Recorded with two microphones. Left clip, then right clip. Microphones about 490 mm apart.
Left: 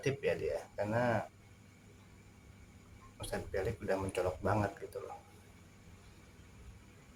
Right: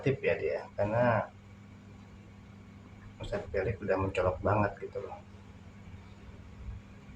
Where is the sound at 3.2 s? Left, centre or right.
Left.